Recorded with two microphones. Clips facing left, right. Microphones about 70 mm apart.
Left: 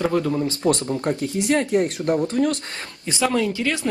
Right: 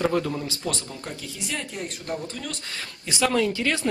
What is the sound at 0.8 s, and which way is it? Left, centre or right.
Speech, left.